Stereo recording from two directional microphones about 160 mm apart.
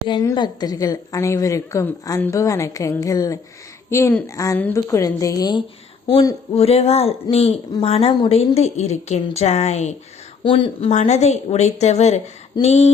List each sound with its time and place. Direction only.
0.1 s a woman's voice: 25° left (ahead or behind)
6.5 s a woman's voice: 40° left (ahead or behind)
10.4 s speech: 35° left (ahead or behind)